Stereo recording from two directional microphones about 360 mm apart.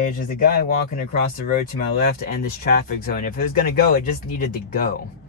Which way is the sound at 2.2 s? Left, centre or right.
Left.